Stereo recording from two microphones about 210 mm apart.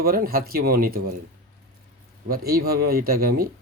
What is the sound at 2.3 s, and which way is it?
Speech, 45° right (ahead or behind).